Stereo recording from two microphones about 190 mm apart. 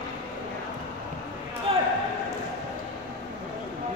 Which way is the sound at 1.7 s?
30° right (ahead or behind).